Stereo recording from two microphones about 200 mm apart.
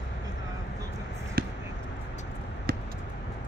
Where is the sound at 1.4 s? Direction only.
50° right (ahead or behind).